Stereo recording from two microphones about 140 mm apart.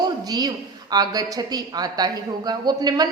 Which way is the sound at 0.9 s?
30° right (ahead or behind).